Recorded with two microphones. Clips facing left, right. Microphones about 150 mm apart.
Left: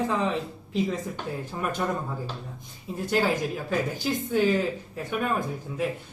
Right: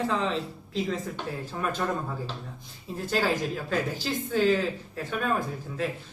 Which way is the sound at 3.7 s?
15° left (ahead or behind).